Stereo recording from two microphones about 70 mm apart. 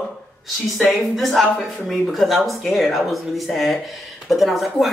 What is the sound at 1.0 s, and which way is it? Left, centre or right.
Speech, centre.